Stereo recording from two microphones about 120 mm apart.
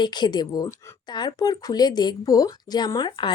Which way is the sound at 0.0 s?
35° left (ahead or behind).